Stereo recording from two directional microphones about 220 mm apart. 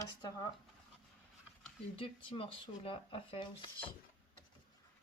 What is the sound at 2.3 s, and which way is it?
Speech, 25° left (ahead or behind).